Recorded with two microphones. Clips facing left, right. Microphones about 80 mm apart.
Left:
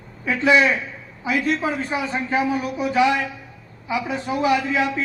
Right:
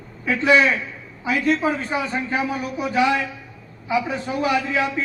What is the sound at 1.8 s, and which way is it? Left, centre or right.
Speech, left.